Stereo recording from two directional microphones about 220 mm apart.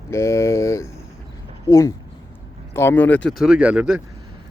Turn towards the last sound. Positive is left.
turn(degrees=-5)  # may be behind; listen again after turning